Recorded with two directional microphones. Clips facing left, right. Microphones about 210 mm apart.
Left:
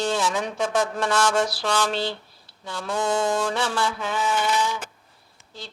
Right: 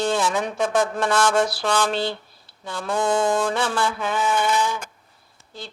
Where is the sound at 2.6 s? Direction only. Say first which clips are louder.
Right 3 dB; 55° right (ahead or behind).